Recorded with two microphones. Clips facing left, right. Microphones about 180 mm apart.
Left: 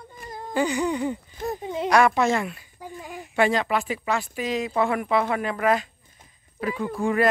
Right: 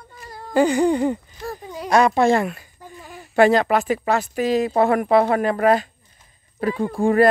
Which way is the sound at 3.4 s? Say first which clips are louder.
Right 7 dB; 40° right (ahead or behind).